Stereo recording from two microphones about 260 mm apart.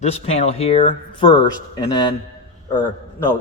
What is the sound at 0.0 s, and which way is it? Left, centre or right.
A man's voice, left.